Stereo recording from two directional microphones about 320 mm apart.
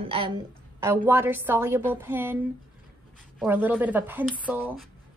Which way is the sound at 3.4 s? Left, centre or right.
Centre.